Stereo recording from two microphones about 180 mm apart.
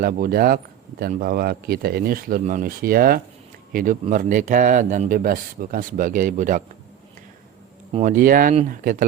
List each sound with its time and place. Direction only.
0.0 s speech: 55° right (ahead or behind)
8.0 s speech: 50° right (ahead or behind)